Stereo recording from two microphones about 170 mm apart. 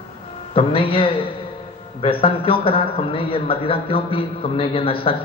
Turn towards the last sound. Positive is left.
turn(degrees=35)  # may be behind; listen again after turning